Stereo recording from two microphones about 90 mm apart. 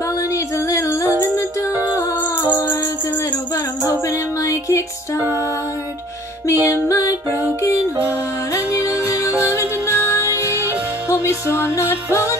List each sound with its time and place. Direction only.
0.3 s female singing: 35° left (ahead or behind)
2.5 s music: 20° left (ahead or behind)
4.1 s music: 35° left (ahead or behind)
6.4 s music: 35° left (ahead or behind)
9.5 s music: 30° left (ahead or behind)